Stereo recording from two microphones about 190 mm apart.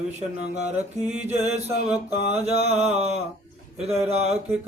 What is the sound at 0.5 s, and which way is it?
Mantra, 35° right (ahead or behind).